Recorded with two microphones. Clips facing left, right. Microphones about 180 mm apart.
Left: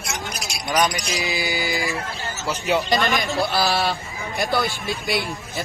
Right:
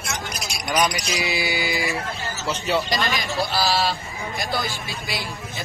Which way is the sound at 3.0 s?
55° left (ahead or behind).